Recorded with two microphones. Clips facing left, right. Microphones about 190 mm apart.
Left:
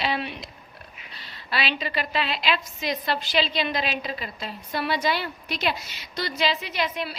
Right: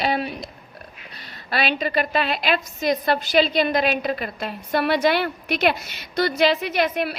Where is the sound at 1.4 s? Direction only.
50° right (ahead or behind).